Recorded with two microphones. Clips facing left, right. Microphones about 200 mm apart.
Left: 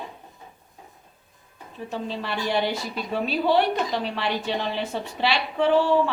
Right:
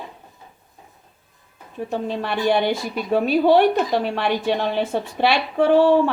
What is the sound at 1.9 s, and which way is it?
A woman's voice, 55° right (ahead or behind).